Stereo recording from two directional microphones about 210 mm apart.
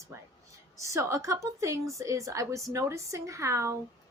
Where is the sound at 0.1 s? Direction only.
10° right (ahead or behind).